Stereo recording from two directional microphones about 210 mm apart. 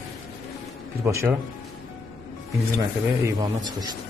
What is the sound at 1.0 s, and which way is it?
Speech, 15° right (ahead or behind).